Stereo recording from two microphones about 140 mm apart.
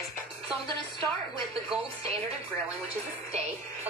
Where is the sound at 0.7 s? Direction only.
35° right (ahead or behind).